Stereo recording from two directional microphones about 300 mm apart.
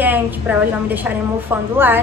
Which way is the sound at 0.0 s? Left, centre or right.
Centre.